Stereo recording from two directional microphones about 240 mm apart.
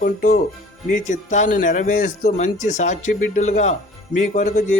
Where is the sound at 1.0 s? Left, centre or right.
Left.